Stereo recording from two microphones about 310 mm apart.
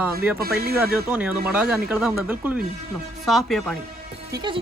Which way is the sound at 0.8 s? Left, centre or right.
Centre.